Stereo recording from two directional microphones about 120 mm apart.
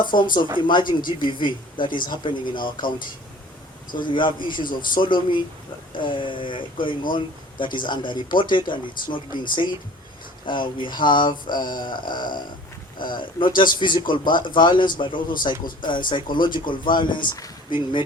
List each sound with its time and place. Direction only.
0.0 s speech: 40° left (ahead or behind)
3.9 s speech: 40° left (ahead or behind)